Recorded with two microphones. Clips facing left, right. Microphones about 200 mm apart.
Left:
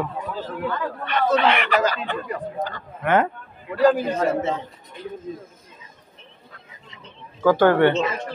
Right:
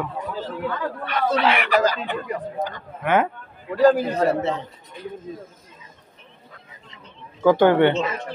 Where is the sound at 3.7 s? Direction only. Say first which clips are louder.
Right 1 dB; 40° right (ahead or behind).